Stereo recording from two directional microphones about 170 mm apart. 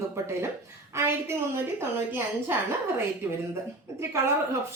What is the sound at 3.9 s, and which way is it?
Speech, 15° right (ahead or behind).